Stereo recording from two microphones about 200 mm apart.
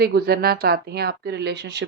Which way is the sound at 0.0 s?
50° right (ahead or behind).